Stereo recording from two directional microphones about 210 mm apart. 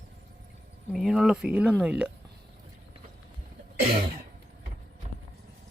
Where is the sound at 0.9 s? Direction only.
Centre (ahead or behind).